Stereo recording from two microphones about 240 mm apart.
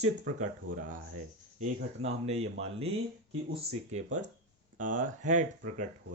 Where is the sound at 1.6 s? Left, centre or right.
Right.